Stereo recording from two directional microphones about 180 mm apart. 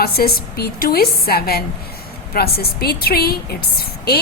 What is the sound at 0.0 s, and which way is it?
A woman's voice, 60° left (ahead or behind).